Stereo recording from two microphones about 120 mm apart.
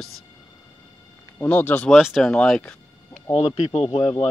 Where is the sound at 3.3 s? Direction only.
50° left (ahead or behind).